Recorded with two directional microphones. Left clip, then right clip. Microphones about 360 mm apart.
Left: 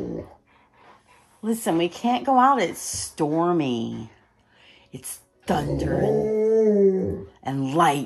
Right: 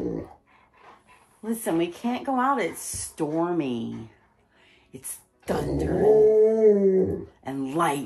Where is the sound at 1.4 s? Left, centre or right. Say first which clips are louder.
Left 3 dB; left.